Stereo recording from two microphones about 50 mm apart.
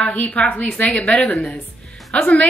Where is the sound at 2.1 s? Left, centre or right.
Left.